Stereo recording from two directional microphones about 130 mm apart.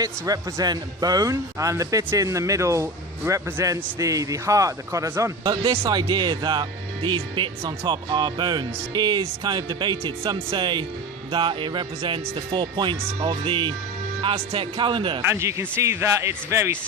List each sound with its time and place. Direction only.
0.0 s speech: 30° right (ahead or behind)
15.2 s speech: 20° right (ahead or behind)